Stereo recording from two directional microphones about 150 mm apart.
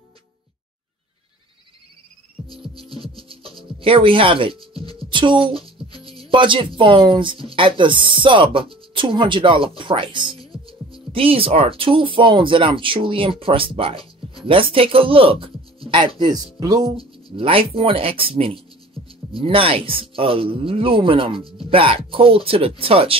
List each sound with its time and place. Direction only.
3.2 s speech: 35° right (ahead or behind)
5.6 s music: 25° left (ahead or behind)
6.3 s speech: 35° right (ahead or behind)
16.9 s speech: 35° right (ahead or behind)